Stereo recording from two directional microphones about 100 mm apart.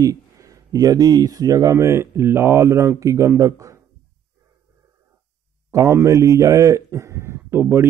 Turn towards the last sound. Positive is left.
turn(degrees=-25)  # may be behind; listen again after turning